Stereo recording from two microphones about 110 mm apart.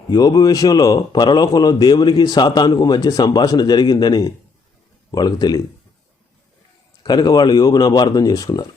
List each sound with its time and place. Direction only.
0.1 s a man's voice: 35° left (ahead or behind)
7.0 s a man's voice: 40° left (ahead or behind)